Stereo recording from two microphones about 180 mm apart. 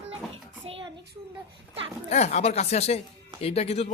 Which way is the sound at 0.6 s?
30° right (ahead or behind).